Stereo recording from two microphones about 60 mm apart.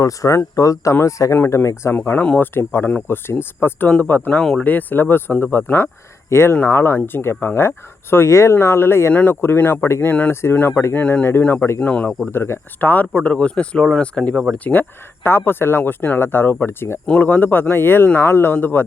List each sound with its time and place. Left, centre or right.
0.0 s speech: left
1.5 s speech: left
2.0 s speech: left
3.8 s speech: left
8.1 s speech: left
11.0 s speech: left
11.8 s speech: left
12.3 s speech: left
13.1 s speech: left